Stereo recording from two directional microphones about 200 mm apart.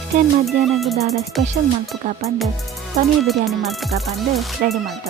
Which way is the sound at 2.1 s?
35° right (ahead or behind).